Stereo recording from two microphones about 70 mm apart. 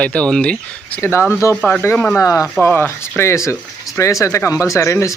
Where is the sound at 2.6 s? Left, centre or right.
Left.